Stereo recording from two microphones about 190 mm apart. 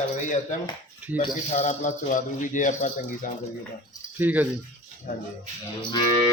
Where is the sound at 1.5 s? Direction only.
40° left (ahead or behind).